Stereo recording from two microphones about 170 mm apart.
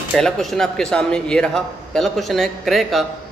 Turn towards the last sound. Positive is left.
turn(degrees=0)  # may be behind; listen again after turning